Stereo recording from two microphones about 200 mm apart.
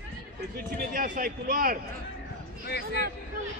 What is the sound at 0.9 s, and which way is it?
Speech, 45° right (ahead or behind).